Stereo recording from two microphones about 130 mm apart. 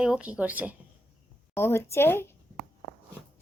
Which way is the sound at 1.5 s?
20° left (ahead or behind).